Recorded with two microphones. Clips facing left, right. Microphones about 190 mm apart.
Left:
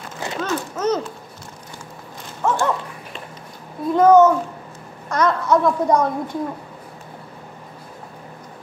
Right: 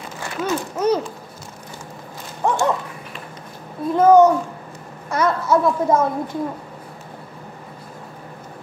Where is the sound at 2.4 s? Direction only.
15° right (ahead or behind).